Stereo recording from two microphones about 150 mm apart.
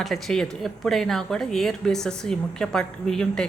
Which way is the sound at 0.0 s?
Centre (ahead or behind).